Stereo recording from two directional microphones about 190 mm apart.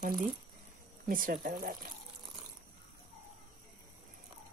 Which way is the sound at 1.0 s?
45° right (ahead or behind).